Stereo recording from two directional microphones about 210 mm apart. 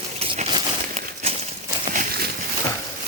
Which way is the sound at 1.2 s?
30° right (ahead or behind).